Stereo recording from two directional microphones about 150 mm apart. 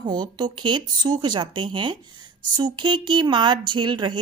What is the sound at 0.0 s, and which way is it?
A woman's voice, 30° right (ahead or behind).